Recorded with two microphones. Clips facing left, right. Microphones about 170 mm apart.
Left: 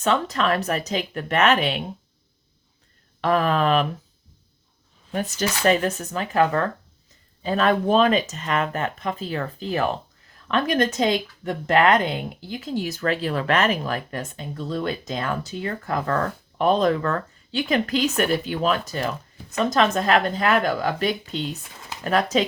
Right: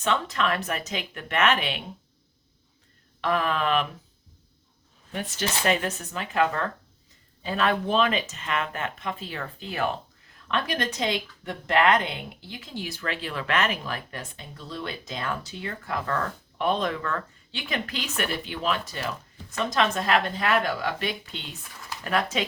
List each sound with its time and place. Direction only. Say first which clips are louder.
0.0 s speech: left 4 dB; 40° left (ahead or behind)
3.2 s speech: left 5 dB; 40° left (ahead or behind)
5.1 s a woman's voice: left 5 dB; 40° left (ahead or behind)
21.7 s a sound: left 1 dB; 25° left (ahead or behind)
22.1 s speech: left 6 dB; 35° left (ahead or behind)